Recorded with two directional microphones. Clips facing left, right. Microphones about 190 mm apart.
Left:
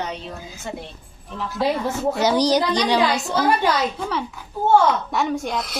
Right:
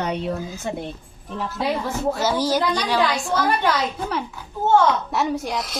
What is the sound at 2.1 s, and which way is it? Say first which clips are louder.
A woman's voice: left 5 dB; 15° left (ahead or behind).